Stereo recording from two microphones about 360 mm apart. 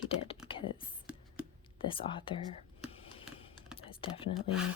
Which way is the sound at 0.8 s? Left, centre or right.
Centre.